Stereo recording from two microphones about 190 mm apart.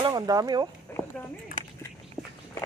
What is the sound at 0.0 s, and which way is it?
Speech, 20° right (ahead or behind).